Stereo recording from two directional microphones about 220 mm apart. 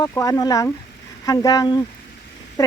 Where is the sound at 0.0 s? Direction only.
15° left (ahead or behind).